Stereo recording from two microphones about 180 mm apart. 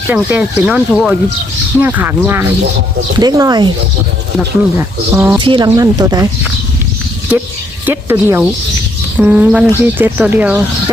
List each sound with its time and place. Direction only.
0.1 s speech: 10° right (ahead or behind)
3.2 s speech: 20° right (ahead or behind)
5.4 s speech: 25° right (ahead or behind)
7.9 s speech: 10° right (ahead or behind)